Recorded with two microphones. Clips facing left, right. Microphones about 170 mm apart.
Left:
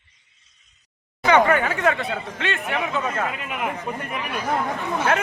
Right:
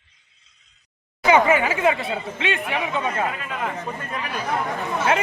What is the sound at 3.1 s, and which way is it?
Speech, 25° right (ahead or behind).